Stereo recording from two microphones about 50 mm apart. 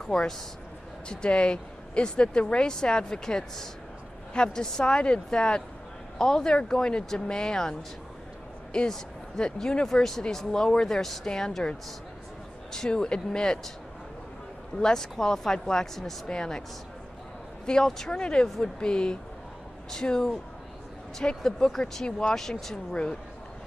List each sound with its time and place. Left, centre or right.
0.0 s speech: centre
8.7 s speech: centre
12.7 s speech: centre
14.8 s speech: centre
17.6 s speech: centre
18.1 s speech: centre
21.4 s speech: centre